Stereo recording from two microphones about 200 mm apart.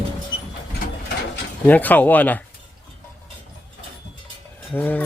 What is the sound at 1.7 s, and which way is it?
Speech, 10° left (ahead or behind).